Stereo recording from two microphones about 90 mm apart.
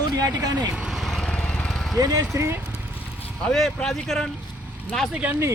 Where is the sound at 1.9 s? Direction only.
40° right (ahead or behind); by 2.8 s 20° right (ahead or behind).